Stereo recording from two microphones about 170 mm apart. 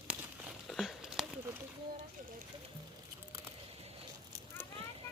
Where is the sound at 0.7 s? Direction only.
Centre (ahead or behind).